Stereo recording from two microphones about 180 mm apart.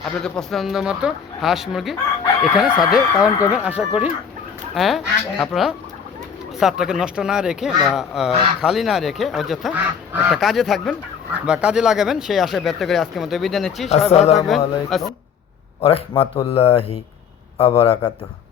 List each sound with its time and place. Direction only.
0.0 s speech: 5° left (ahead or behind)
10.1 s speech: 10° right (ahead or behind)
10.3 s speech: centre (ahead or behind)
14.1 s speech: 35° left (ahead or behind)
14.3 s speech: centre (ahead or behind)
15.8 s speech: 30° left (ahead or behind)